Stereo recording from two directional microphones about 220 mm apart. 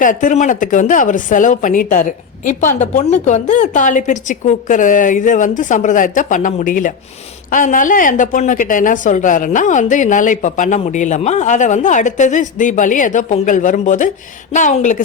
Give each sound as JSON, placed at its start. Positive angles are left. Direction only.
{"t": 0.0, "sound": "a woman's voice", "side_deg": 35}